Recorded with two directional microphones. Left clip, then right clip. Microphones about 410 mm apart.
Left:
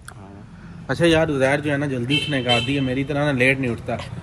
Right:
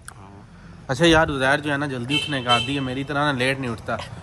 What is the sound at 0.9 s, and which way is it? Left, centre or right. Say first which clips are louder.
Speech: right 1 dB; right.